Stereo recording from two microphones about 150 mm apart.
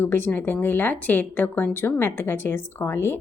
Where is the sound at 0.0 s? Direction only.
15° left (ahead or behind).